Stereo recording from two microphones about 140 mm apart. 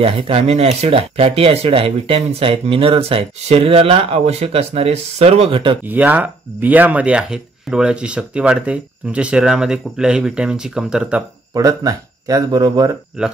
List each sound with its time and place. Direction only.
0.0 s speech: 40° right (ahead or behind)
5.9 s speech: 10° right (ahead or behind)
11.5 s speech: 25° right (ahead or behind)